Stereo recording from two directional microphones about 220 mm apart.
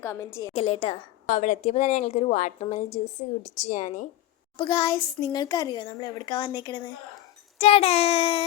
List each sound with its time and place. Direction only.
0.0 s a woman's voice: 10° left (ahead or behind)
0.5 s speech: 25° left (ahead or behind)
4.5 s a child's voice: 20° left (ahead or behind)